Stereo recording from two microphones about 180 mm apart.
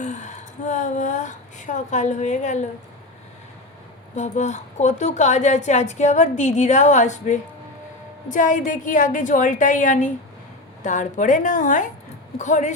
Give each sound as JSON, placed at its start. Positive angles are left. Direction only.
{"t": 0.0, "sound": "a woman's voice", "side_deg": 40}
{"t": 4.1, "sound": "a woman's voice", "side_deg": 40}